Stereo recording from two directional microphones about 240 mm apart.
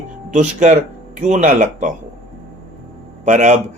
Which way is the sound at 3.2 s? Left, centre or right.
Right.